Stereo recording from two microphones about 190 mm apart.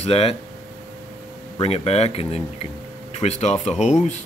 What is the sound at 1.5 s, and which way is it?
Speech, 30° left (ahead or behind).